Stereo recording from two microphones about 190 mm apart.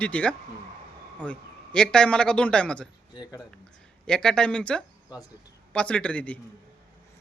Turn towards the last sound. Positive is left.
turn(degrees=5)  # may be behind; listen again after turning